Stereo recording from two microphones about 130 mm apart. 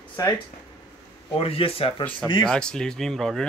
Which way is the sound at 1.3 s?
45° left (ahead or behind).